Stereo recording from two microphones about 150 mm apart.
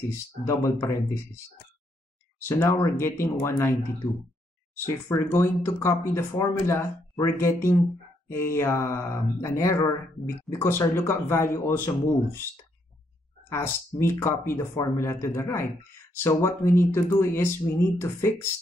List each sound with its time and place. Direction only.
0.1 s speech: 20° left (ahead or behind)
2.4 s speech: 15° left (ahead or behind)
13.5 s speech: 15° left (ahead or behind)